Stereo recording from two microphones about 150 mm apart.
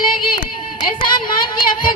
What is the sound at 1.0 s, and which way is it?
Speech, 30° left (ahead or behind).